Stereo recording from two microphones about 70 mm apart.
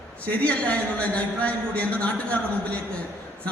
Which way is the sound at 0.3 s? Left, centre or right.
Centre.